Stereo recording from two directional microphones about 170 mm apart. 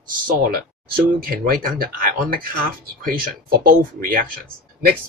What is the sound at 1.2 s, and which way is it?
Speech, 60° right (ahead or behind).